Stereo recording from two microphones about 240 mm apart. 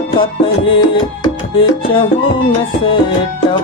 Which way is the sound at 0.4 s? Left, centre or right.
Centre.